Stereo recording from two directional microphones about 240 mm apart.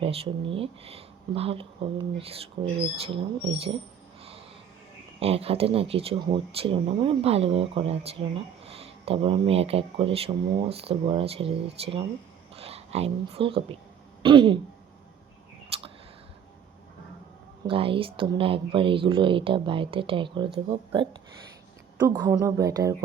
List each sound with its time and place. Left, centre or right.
0.0 s speech: right
5.2 s speech: right
15.7 s a sound: right
17.7 s speech: right